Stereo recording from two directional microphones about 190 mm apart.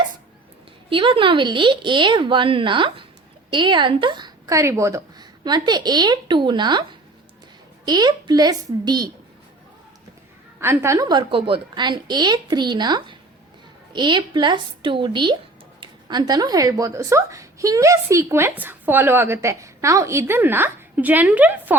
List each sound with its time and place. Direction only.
0.9 s a woman's voice: 25° right (ahead or behind)
7.9 s a woman's voice: 20° right (ahead or behind)
10.6 s a woman's voice: 15° right (ahead or behind)